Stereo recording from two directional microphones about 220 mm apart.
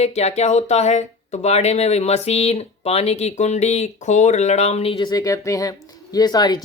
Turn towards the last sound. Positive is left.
turn(degrees=20)  # may be behind; listen again after turning